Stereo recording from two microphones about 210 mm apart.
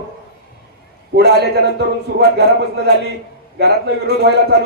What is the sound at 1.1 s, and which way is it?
Speech, 50° right (ahead or behind).